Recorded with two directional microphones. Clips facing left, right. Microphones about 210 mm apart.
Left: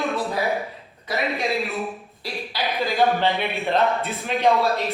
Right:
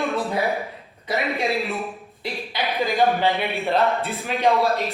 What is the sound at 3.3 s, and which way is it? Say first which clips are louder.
Speech: right 1 dB; centre (ahead or behind).